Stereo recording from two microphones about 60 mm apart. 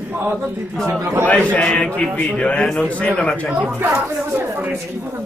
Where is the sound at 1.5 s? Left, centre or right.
Centre.